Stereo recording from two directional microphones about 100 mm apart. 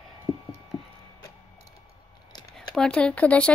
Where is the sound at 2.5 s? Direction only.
5° left (ahead or behind).